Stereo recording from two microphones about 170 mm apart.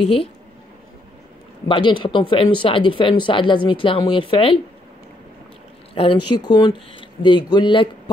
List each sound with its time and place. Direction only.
1.7 s speech: 25° left (ahead or behind)
5.9 s speech: 30° left (ahead or behind)